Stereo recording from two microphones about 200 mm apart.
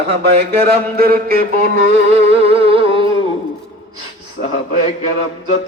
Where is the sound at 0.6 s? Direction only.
50° right (ahead or behind).